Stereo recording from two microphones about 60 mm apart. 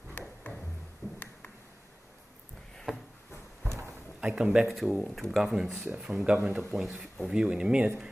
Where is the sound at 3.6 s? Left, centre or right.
Right.